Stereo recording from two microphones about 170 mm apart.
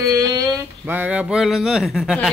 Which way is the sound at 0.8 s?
10° right (ahead or behind).